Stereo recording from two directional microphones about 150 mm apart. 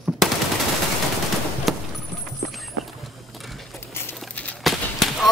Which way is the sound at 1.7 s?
Centre (ahead or behind).